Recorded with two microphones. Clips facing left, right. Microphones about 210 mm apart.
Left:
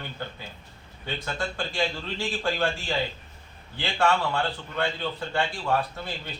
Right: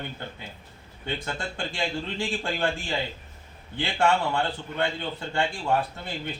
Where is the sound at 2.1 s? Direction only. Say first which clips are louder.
Left 1 dB; 20° right (ahead or behind).